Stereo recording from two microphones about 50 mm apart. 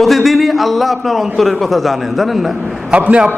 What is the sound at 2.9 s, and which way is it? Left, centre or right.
Speech, right.